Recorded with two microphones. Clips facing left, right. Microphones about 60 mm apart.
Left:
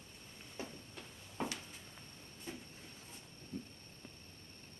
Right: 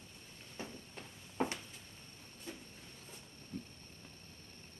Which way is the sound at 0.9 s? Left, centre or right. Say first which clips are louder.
Right 1 dB; right.